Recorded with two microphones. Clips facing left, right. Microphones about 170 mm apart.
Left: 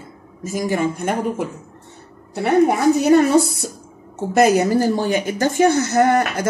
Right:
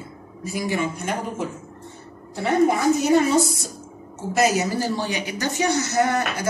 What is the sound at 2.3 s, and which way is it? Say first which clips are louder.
A woman's voice: left 4 dB; 60° left (ahead or behind).